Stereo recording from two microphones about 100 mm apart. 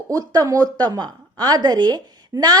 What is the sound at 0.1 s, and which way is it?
A woman's voice, 35° right (ahead or behind).